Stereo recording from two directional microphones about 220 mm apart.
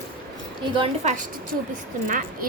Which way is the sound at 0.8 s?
35° right (ahead or behind).